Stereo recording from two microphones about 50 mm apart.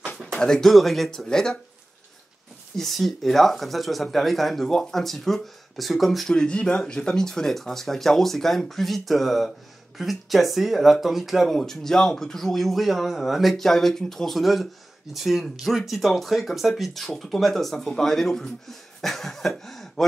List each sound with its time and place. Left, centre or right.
0.3 s speech: centre
1.2 s speech: centre
2.8 s speech: centre
6.3 s speech: centre